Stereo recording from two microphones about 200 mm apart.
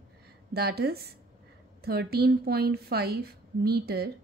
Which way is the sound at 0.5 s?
50° right (ahead or behind).